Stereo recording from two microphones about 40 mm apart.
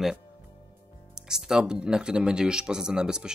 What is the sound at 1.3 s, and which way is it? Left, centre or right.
Speech, centre.